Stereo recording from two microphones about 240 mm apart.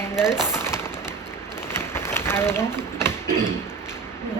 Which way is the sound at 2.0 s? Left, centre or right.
Centre.